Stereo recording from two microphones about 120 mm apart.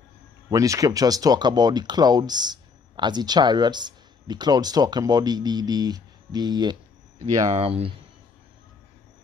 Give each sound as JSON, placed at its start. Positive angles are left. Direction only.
{"t": 0.5, "sound": "speech", "side_deg": -30}
{"t": 7.5, "sound": "speech", "side_deg": -55}